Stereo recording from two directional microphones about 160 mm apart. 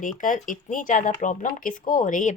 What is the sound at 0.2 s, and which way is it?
Speech, 55° left (ahead or behind).